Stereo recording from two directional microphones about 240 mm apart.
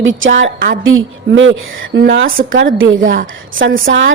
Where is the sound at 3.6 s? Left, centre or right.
Right.